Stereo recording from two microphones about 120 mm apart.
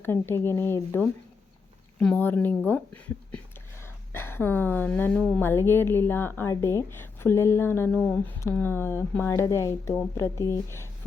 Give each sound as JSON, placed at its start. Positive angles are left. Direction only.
{"t": 0.0, "sound": "a woman's voice", "side_deg": 20}
{"t": 5.4, "sound": "a woman's voice", "side_deg": 20}